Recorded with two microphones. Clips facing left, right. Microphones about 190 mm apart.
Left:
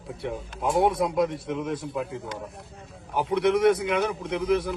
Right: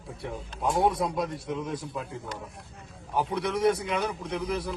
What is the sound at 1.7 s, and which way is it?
Speech, 25° left (ahead or behind).